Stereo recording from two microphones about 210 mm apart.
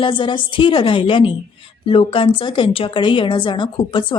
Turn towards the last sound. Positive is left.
turn(degrees=25)  # may be behind; listen again after turning